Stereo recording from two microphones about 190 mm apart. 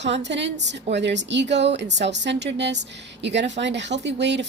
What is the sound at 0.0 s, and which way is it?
Speech, 65° right (ahead or behind).